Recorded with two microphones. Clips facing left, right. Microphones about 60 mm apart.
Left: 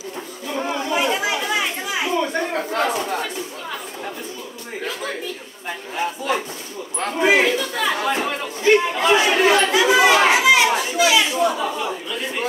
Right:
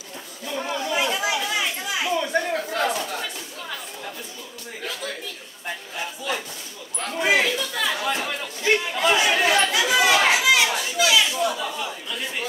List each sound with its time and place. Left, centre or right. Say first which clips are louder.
0.6 s chatter: left 3 dB; left
5.9 s a sound: left 8 dB; left
7.0 s speech: left 4 dB; left